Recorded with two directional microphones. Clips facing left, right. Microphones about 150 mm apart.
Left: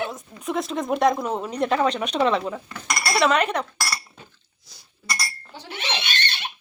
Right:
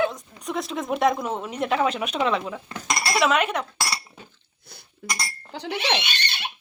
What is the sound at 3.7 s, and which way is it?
Chink, 20° right (ahead or behind).